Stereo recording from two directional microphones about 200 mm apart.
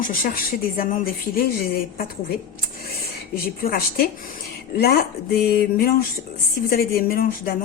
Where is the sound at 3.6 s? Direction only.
50° left (ahead or behind).